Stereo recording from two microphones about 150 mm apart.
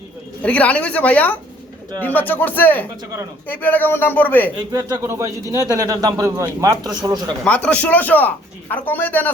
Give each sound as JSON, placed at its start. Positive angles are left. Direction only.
{"t": 0.4, "sound": "speech", "side_deg": 10}
{"t": 4.5, "sound": "a man's voice", "side_deg": -30}
{"t": 7.4, "sound": "speech", "side_deg": 10}